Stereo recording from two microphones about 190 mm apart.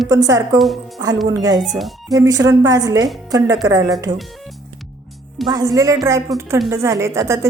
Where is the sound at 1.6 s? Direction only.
Centre (ahead or behind).